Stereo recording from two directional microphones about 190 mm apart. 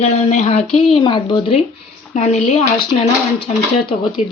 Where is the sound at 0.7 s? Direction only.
30° left (ahead or behind).